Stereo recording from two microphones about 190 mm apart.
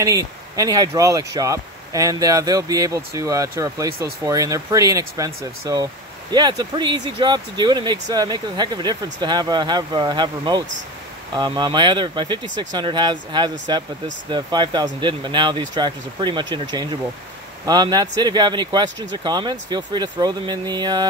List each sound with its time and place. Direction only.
0.0 s speech: 20° right (ahead or behind)